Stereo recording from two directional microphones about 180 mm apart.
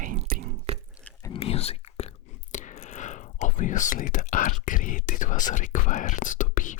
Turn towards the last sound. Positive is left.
turn(degrees=45)  # may be behind; listen again after turning